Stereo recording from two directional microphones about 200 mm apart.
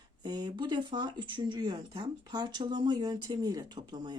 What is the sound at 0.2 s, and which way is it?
Speech, 20° right (ahead or behind).